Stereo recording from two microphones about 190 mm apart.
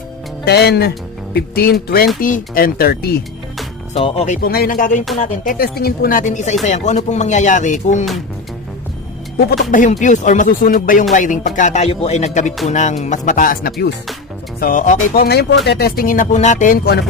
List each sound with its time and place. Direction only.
0.4 s speech: 60° left (ahead or behind)
3.9 s speech: 30° left (ahead or behind)
4.4 s speech: 50° left (ahead or behind)
9.7 s speech: 40° left (ahead or behind)
14.6 s speech: 45° left (ahead or behind)